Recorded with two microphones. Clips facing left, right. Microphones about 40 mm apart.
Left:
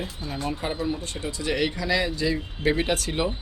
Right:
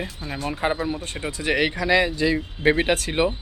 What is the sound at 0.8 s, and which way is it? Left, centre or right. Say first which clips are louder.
Speech: right 1 dB; right.